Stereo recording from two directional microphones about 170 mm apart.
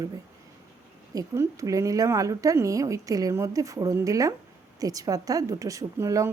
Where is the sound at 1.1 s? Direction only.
20° right (ahead or behind).